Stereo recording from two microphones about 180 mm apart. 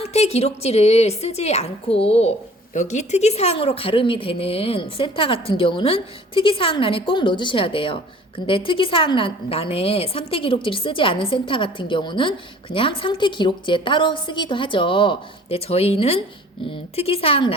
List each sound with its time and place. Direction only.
0.0 s a woman's voice: 35° left (ahead or behind)